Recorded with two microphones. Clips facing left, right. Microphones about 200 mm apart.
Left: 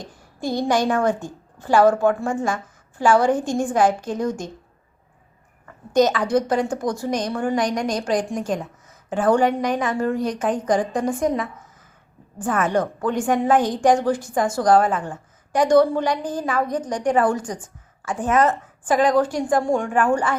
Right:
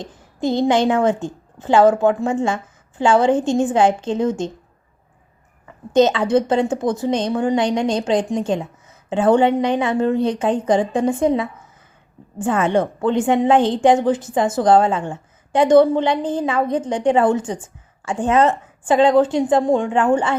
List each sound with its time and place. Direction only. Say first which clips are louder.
0.0 s a woman's voice: right 6 dB; 20° right (ahead or behind)
5.9 s a woman's voice: right 3 dB; 25° right (ahead or behind)